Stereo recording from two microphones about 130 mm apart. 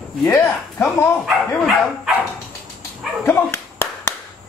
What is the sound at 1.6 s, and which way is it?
Speech, centre (ahead or behind).